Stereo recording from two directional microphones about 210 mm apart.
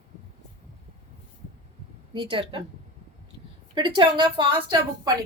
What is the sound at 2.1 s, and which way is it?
Speech, 25° right (ahead or behind).